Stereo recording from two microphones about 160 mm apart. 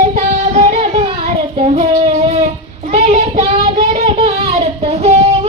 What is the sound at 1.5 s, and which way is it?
Child singing, 40° right (ahead or behind).